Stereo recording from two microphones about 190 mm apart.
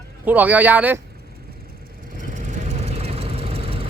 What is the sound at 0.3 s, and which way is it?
Speech, 10° right (ahead or behind).